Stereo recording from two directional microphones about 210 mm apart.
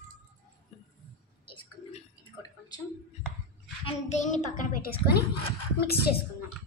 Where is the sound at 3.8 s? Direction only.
30° left (ahead or behind); by 6.1 s 50° left (ahead or behind).